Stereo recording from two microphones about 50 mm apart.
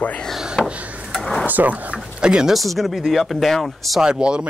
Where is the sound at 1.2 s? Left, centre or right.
Centre.